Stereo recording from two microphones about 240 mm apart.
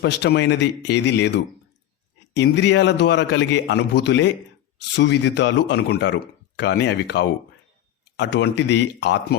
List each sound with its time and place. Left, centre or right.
0.0 s speech: left